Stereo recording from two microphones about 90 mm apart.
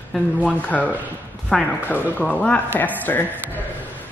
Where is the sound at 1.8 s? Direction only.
15° left (ahead or behind).